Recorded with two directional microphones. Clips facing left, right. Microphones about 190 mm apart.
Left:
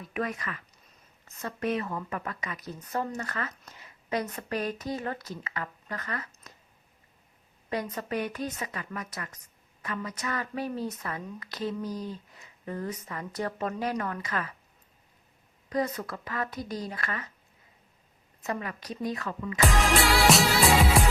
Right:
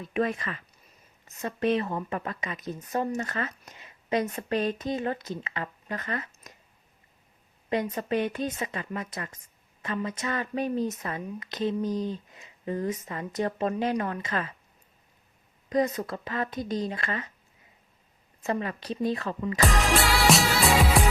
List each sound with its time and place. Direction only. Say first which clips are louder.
0.0 s speech: right 5 dB; 25° right (ahead or behind)
7.9 s speech: right 4 dB; 25° right (ahead or behind)
15.7 s speech: right 4 dB; 20° right (ahead or behind)
18.4 s speech: right 4 dB; 30° right (ahead or behind)
19.6 s music: left 1 dB; centre (ahead or behind)